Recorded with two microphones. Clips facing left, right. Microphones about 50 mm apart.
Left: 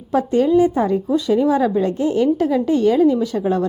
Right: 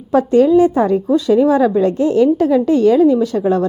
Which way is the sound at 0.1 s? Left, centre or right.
Right.